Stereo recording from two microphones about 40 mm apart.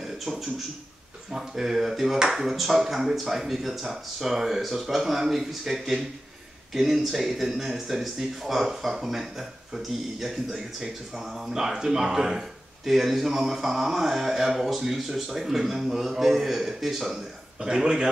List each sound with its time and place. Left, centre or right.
0.0 s a sound: centre
1.3 s speech: centre
17.6 s speech: centre